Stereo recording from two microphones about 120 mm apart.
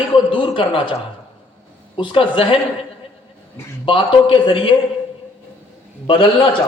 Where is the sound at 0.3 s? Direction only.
45° left (ahead or behind).